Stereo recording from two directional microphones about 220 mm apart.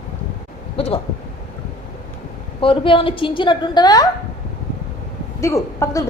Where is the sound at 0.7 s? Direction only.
25° left (ahead or behind).